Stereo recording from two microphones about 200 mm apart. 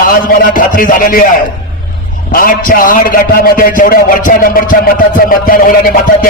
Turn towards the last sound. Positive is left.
turn(degrees=45)  # may be behind; listen again after turning